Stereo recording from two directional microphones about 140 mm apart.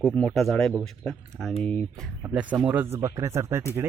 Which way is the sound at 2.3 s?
10° right (ahead or behind).